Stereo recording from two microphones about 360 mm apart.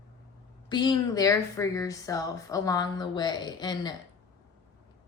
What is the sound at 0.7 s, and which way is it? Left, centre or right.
A woman's voice, centre.